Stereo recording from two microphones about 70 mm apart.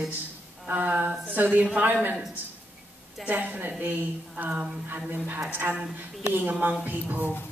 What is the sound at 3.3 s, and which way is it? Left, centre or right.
Speech, right.